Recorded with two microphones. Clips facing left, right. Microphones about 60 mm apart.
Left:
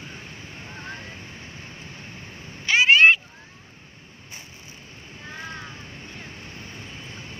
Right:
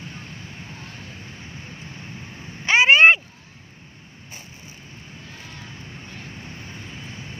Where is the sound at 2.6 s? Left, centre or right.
Right.